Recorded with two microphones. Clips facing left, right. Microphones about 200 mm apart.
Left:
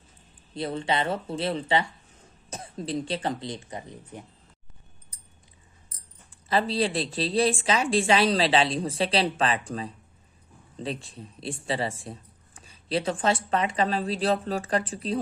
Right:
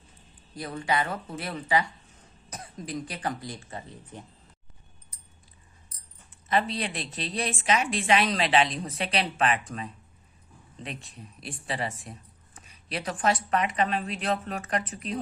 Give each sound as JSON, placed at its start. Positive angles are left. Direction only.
{"t": 0.5, "sound": "speech", "side_deg": 25}
{"t": 6.3, "sound": "a woman's voice", "side_deg": 30}